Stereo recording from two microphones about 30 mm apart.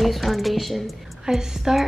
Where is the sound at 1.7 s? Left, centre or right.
Centre.